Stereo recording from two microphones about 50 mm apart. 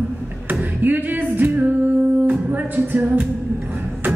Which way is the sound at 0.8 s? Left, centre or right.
Right.